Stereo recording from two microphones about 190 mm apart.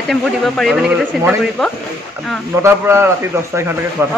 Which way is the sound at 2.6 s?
15° right (ahead or behind).